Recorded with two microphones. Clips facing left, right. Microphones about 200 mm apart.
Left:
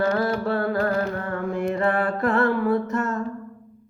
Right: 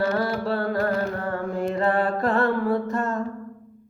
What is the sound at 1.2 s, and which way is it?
Music, 35° right (ahead or behind).